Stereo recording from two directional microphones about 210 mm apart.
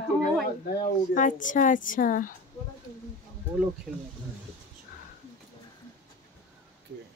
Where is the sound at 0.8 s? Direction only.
40° left (ahead or behind).